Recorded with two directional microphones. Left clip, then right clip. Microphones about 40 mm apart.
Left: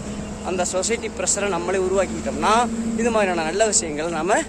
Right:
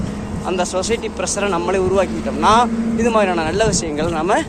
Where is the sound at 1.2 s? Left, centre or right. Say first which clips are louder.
Right 4 dB; centre.